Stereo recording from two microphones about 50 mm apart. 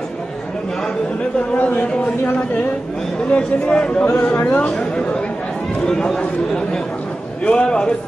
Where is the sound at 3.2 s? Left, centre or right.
Left.